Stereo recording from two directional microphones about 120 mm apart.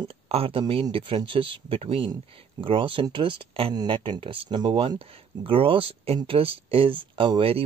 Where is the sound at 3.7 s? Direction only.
40° right (ahead or behind).